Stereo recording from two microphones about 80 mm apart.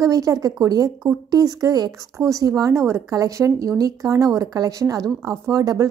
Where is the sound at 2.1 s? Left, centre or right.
Right.